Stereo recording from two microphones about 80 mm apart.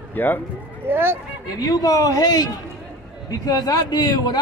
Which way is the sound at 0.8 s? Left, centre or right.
Right.